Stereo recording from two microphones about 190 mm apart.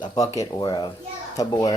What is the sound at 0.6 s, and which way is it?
Speech, 20° left (ahead or behind).